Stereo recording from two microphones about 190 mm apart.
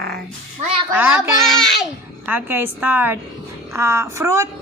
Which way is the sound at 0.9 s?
10° right (ahead or behind).